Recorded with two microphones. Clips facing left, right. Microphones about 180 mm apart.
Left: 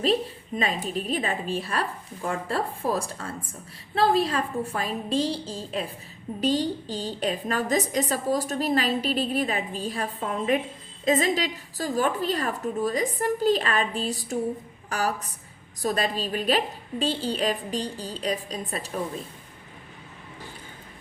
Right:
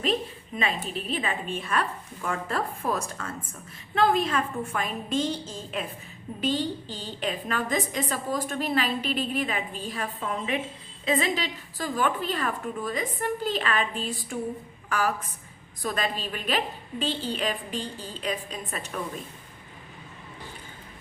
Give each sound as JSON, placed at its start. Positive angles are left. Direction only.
{"t": 0.0, "sound": "a woman's voice", "side_deg": 40}